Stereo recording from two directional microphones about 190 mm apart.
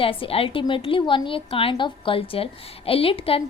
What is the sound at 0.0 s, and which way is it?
A woman's voice, 30° left (ahead or behind).